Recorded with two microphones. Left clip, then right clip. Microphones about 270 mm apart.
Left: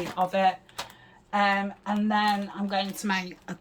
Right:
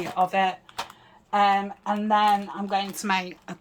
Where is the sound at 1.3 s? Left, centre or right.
Centre.